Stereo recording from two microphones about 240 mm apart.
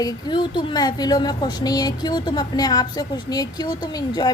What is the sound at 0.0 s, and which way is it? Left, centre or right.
A woman's voice, centre.